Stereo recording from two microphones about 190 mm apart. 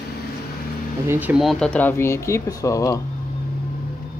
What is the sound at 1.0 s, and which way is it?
Speech, 10° right (ahead or behind).